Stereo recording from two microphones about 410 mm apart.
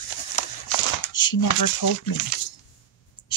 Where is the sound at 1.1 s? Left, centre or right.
Left.